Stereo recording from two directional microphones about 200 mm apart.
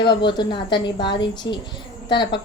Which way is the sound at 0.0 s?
25° left (ahead or behind).